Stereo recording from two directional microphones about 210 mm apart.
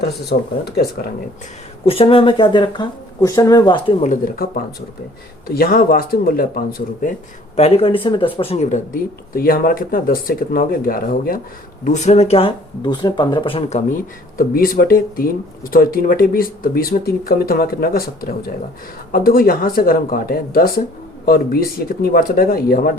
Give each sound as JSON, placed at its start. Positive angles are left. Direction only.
{"t": 0.0, "sound": "speech", "side_deg": 50}
{"t": 1.8, "sound": "speech", "side_deg": 25}
{"t": 4.0, "sound": "speech", "side_deg": 40}